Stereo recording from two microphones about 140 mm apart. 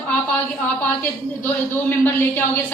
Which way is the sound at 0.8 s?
10° left (ahead or behind).